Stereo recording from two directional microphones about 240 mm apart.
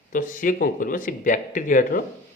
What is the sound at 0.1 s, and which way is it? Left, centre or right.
Speech, left.